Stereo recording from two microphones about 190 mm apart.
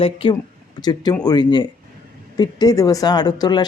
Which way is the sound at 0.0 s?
30° left (ahead or behind).